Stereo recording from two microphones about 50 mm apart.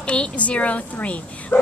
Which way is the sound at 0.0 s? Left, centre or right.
Left.